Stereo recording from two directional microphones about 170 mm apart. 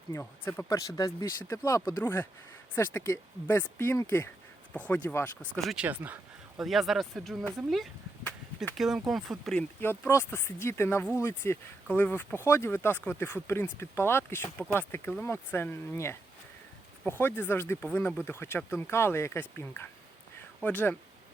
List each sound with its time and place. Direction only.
0.1 s speech: 15° left (ahead or behind)